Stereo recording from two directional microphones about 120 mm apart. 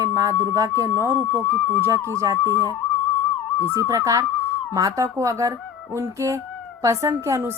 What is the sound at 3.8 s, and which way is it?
A woman's voice, 30° right (ahead or behind).